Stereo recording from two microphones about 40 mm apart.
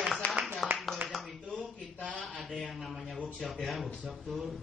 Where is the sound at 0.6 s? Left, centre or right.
Centre.